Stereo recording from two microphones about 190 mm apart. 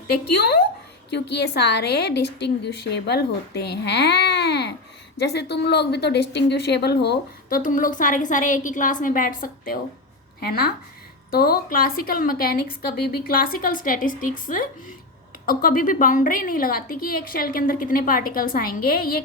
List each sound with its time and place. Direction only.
1.1 s a woman's voice: 60° left (ahead or behind)